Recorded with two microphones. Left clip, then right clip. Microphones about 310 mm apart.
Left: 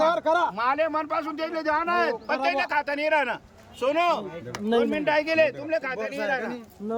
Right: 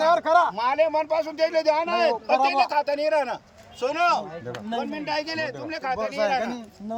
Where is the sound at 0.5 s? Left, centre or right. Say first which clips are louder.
Right 2 dB; centre.